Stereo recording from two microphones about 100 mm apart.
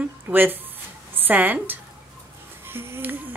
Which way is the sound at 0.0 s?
20° right (ahead or behind).